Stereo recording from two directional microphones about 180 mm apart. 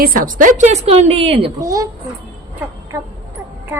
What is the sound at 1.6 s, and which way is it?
Speech, 20° right (ahead or behind).